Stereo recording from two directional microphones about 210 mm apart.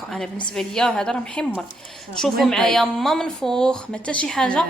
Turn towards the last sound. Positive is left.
turn(degrees=5)  # may be behind; listen again after turning